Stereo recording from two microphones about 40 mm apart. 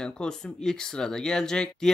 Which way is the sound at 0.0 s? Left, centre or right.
Left.